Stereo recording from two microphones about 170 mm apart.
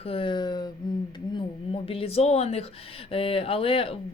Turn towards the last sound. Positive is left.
turn(degrees=35)  # may be behind; listen again after turning